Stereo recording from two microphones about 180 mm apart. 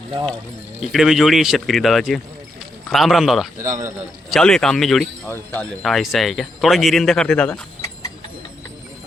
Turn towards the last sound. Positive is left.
turn(degrees=5)  # may be behind; listen again after turning